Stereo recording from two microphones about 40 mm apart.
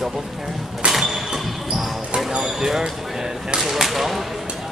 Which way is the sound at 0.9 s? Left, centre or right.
Centre.